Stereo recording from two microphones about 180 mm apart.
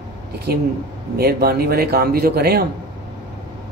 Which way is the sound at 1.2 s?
60° right (ahead or behind).